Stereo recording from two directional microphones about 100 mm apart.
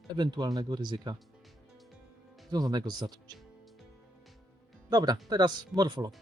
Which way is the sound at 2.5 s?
40° right (ahead or behind).